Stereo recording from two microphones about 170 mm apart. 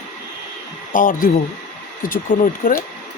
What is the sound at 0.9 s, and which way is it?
Speech, 50° left (ahead or behind).